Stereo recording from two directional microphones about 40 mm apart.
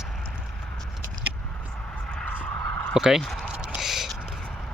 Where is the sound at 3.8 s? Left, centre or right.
Centre.